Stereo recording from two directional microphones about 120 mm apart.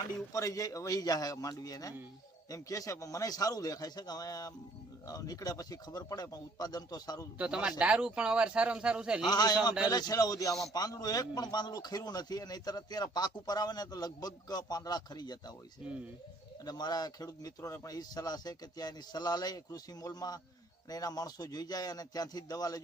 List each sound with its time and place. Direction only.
0.3 s a man's voice: 30° left (ahead or behind)
7.3 s speech: 10° right (ahead or behind)
9.2 s a man's voice: 35° left (ahead or behind)
15.8 s speech: 10° right (ahead or behind)
16.6 s a man's voice: 35° left (ahead or behind)